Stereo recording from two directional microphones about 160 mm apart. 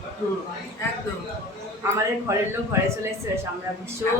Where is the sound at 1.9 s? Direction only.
20° right (ahead or behind).